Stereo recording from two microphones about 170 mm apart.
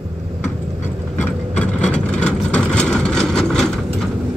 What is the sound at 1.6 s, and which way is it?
Vehicle, 5° left (ahead or behind).